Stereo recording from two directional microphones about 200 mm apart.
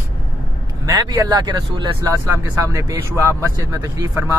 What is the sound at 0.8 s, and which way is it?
Speech, 20° right (ahead or behind).